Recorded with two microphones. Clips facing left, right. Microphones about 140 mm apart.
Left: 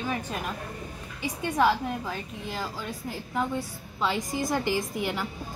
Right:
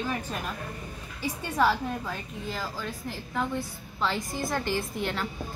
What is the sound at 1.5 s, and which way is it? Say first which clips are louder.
A woman's voice: left 1 dB; 15° left (ahead or behind).